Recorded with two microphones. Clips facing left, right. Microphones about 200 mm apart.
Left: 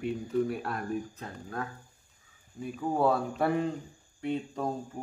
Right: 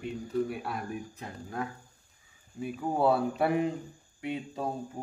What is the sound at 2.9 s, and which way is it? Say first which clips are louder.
Cricket: right 1 dB; 5° right (ahead or behind).